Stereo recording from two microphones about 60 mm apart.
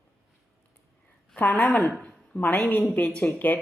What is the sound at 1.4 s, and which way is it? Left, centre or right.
Speech, left.